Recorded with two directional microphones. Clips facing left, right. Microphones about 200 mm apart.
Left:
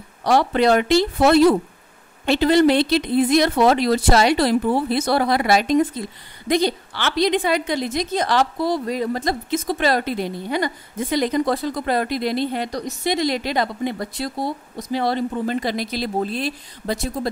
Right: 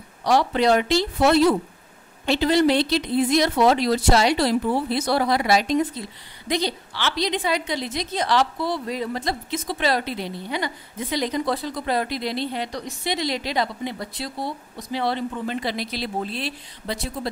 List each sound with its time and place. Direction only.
0.2 s a woman's voice: 55° left (ahead or behind)